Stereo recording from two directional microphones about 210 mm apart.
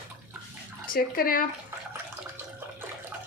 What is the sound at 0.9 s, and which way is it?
Speech, 45° left (ahead or behind).